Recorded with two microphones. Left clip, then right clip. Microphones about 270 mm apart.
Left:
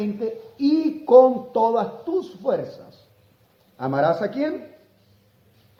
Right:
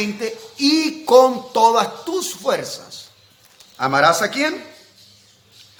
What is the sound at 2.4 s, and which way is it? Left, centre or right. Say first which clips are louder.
Speech: right 4 dB; centre.